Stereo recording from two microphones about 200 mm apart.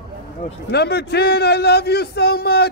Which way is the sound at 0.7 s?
55° left (ahead or behind).